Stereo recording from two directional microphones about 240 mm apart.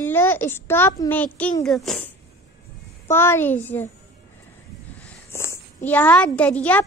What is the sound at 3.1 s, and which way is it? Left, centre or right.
Speech, centre.